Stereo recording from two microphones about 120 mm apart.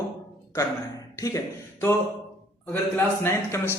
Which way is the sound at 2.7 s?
20° left (ahead or behind).